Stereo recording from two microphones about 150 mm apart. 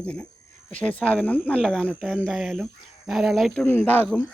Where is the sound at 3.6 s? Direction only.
15° left (ahead or behind).